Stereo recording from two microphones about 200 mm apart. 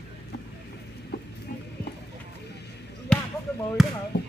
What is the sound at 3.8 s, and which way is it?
Basketball bounce, centre (ahead or behind).